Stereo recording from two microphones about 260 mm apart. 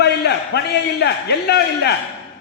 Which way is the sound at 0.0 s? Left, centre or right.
Left.